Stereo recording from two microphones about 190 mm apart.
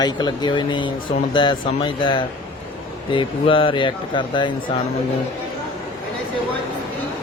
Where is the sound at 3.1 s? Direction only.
25° left (ahead or behind).